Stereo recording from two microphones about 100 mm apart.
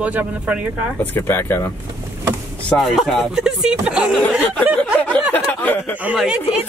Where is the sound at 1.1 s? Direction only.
20° left (ahead or behind).